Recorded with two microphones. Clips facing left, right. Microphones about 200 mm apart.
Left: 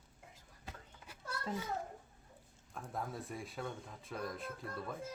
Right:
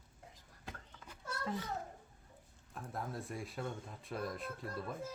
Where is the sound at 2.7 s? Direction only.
Centre (ahead or behind).